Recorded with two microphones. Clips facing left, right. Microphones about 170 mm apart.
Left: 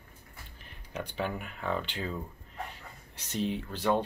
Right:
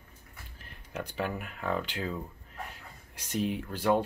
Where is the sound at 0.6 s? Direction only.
5° right (ahead or behind).